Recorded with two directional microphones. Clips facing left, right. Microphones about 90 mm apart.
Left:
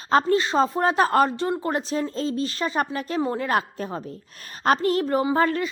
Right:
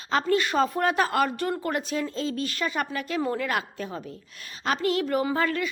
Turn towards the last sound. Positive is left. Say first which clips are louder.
# left 4 dB
turn(degrees=35)  # may be behind; listen again after turning